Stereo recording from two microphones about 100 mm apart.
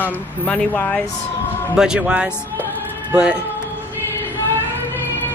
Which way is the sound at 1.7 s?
5° right (ahead or behind).